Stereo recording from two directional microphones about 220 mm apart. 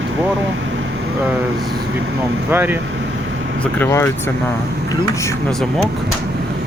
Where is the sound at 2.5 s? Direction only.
10° right (ahead or behind).